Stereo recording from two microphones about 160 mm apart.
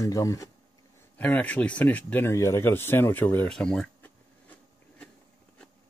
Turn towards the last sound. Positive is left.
turn(degrees=10)  # may be behind; listen again after turning